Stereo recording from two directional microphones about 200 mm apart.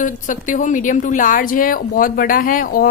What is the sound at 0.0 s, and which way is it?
A woman's voice, 40° left (ahead or behind).